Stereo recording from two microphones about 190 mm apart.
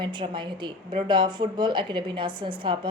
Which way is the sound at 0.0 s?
25° right (ahead or behind).